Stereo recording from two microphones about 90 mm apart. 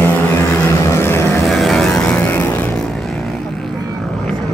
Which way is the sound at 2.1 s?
25° left (ahead or behind).